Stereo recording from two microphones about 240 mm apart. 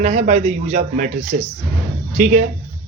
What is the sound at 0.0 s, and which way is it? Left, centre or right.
Speech, right.